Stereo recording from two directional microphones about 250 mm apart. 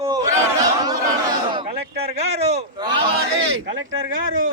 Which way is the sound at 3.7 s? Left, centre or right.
Right.